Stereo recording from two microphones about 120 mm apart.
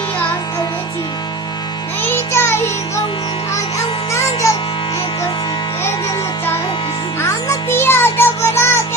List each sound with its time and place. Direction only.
2.0 s music: 20° left (ahead or behind)
4.1 s music: 25° left (ahead or behind)
7.2 s music: 20° left (ahead or behind)